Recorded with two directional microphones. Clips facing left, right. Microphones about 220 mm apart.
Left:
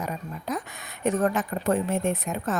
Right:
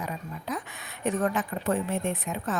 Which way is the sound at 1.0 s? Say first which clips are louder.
Left 3 dB; 40° left (ahead or behind).